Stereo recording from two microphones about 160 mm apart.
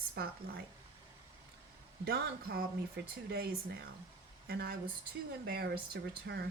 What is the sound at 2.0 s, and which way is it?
A woman's voice, 75° right (ahead or behind).